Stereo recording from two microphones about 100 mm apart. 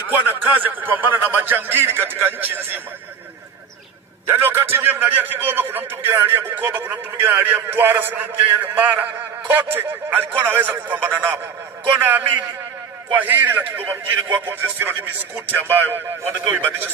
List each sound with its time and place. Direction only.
0.3 s a man's voice: 20° right (ahead or behind)
4.3 s a man's voice: 20° right (ahead or behind)